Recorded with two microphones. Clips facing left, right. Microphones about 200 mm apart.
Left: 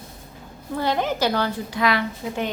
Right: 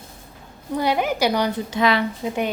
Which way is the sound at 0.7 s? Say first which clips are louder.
Right 2 dB; 10° right (ahead or behind).